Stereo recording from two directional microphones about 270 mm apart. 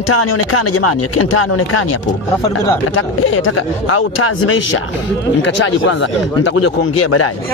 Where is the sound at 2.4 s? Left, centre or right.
Centre.